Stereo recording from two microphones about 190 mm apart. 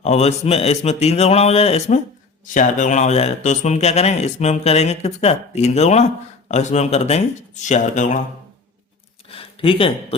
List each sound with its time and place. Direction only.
0.0 s speech: 35° left (ahead or behind)
9.3 s speech: 30° left (ahead or behind)